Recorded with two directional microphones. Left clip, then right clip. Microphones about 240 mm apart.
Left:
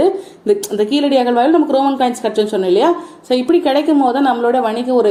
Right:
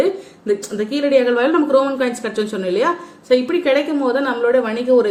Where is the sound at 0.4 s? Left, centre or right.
Left.